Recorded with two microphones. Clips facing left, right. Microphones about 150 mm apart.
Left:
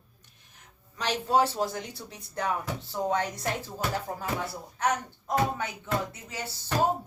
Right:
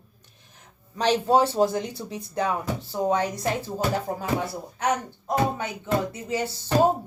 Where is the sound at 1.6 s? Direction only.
35° right (ahead or behind).